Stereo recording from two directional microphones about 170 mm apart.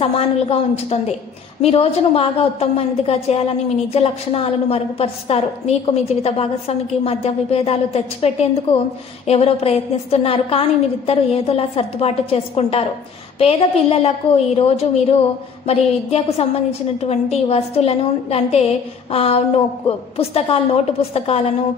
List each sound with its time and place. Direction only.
0.0 s a woman's voice: 35° left (ahead or behind)